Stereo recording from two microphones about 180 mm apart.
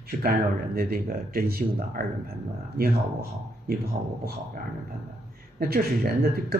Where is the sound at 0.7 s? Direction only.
55° right (ahead or behind).